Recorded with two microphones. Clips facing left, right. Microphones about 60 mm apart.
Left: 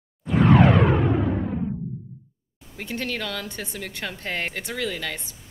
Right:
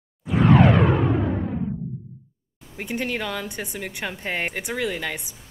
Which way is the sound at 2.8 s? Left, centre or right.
Centre.